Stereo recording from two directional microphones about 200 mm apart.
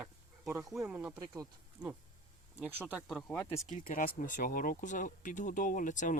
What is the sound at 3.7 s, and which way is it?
Speech, 45° left (ahead or behind).